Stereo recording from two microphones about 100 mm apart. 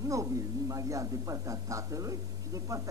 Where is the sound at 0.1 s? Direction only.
35° right (ahead or behind).